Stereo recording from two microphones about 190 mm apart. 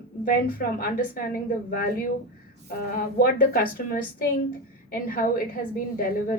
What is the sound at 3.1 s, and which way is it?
A woman's voice, 50° left (ahead or behind).